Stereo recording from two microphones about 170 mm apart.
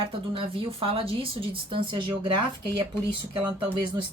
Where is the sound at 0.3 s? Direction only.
30° right (ahead or behind).